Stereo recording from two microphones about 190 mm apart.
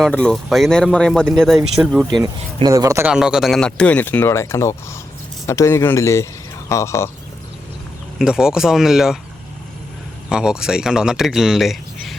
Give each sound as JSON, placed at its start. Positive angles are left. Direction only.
{"t": 0.0, "sound": "speech", "side_deg": 5}
{"t": 2.2, "sound": "speech", "side_deg": -20}
{"t": 3.1, "sound": "speech", "side_deg": -5}
{"t": 8.2, "sound": "speech", "side_deg": -5}
{"t": 10.2, "sound": "speech", "side_deg": -5}